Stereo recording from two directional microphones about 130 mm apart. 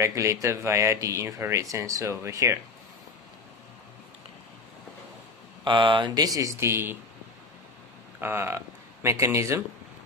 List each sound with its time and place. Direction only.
0.0 s speech: 20° right (ahead or behind)
5.6 s speech: 40° right (ahead or behind); by 7.0 s 20° right (ahead or behind)
8.2 s speech: 15° right (ahead or behind)